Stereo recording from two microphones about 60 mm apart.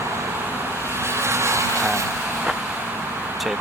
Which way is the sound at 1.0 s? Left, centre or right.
Right.